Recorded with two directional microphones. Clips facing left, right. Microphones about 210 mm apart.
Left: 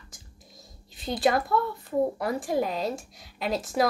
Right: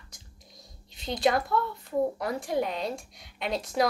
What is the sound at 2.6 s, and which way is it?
A woman's voice, centre (ahead or behind).